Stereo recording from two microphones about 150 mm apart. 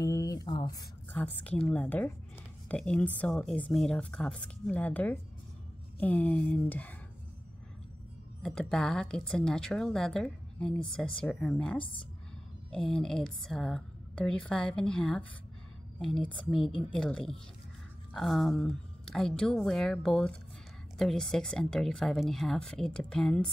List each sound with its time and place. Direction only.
0.0 s speech: 25° left (ahead or behind)
1.1 s speech: 10° left (ahead or behind)
8.4 s a woman's voice: 5° left (ahead or behind)
11.8 s speech: 35° left (ahead or behind)
12.7 s a woman's voice: 5° left (ahead or behind)